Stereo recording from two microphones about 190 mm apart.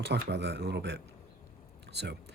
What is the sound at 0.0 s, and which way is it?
Speech, 65° right (ahead or behind).